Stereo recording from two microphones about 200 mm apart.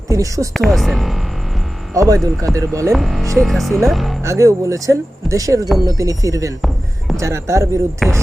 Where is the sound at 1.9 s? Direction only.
15° right (ahead or behind).